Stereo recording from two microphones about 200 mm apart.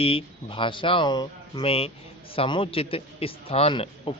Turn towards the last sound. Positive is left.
turn(degrees=30)  # may be behind; listen again after turning